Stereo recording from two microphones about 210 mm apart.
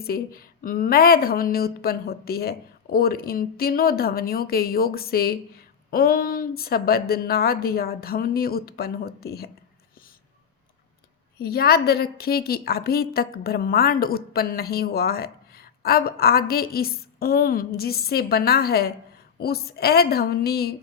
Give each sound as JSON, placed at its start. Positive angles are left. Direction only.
{"t": 0.0, "sound": "a woman's voice", "side_deg": 45}
{"t": 11.3, "sound": "a woman's voice", "side_deg": 50}